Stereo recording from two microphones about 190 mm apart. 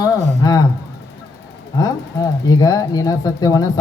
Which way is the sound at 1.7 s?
20° left (ahead or behind).